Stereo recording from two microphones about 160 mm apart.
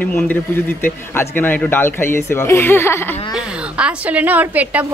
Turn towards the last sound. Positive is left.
turn(degrees=-10)  # may be behind; listen again after turning